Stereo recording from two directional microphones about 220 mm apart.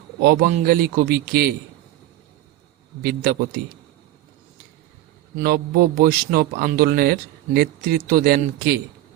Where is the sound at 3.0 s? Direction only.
40° right (ahead or behind).